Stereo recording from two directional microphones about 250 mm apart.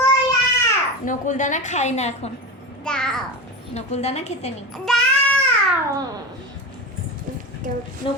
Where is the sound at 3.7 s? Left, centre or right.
Left.